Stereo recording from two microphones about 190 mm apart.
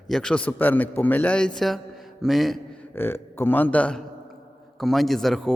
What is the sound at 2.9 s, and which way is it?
A man's voice, 10° left (ahead or behind).